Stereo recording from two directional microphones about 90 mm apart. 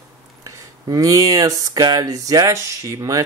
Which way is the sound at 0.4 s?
45° right (ahead or behind).